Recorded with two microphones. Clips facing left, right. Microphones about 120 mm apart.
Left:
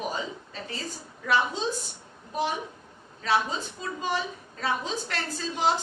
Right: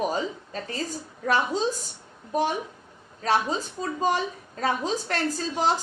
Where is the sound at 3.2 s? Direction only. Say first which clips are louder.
Right 2 dB; 40° right (ahead or behind).